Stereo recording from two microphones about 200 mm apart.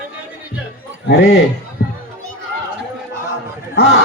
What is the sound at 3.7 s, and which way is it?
Speech, 50° left (ahead or behind).